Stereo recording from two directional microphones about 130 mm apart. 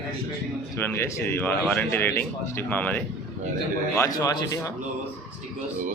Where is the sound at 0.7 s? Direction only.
15° left (ahead or behind).